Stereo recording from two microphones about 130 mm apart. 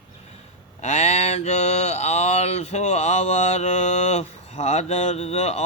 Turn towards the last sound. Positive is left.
turn(degrees=55)  # may be behind; listen again after turning